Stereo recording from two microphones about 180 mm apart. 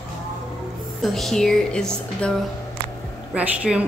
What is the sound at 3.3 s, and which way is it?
Speech, 5° right (ahead or behind).